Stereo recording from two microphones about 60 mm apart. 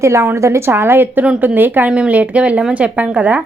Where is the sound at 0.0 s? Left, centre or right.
Right.